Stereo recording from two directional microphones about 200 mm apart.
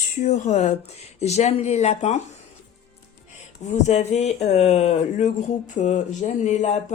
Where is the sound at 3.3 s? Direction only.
35° left (ahead or behind).